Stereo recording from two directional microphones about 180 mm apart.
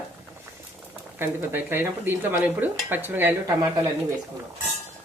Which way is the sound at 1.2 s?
10° right (ahead or behind).